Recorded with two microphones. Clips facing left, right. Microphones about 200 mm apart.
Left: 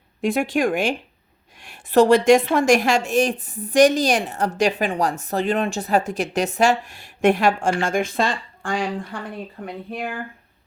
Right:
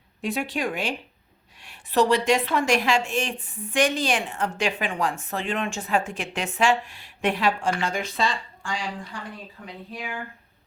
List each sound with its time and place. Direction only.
0.2 s a woman's voice: 50° left (ahead or behind)